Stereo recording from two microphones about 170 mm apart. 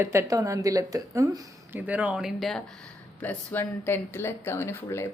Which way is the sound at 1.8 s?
10° right (ahead or behind).